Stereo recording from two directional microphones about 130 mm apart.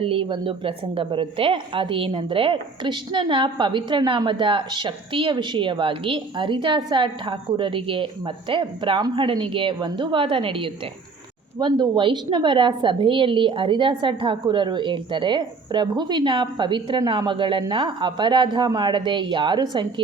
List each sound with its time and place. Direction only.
0.0 s a woman's voice: 45° right (ahead or behind)